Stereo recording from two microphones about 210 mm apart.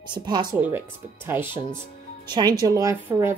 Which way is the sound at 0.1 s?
20° right (ahead or behind).